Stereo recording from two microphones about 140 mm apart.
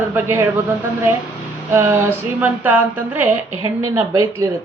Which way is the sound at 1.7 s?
20° right (ahead or behind).